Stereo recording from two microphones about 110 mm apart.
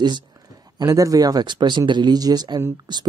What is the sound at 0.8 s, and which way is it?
Speech, 30° right (ahead or behind).